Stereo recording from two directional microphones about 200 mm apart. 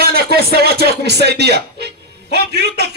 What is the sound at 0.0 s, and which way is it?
A man's voice, 50° right (ahead or behind).